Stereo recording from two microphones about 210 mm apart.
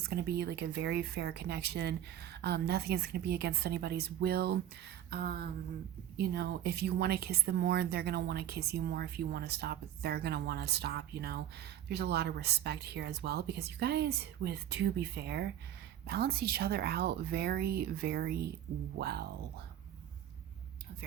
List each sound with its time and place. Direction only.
0.1 s speech: 50° right (ahead or behind)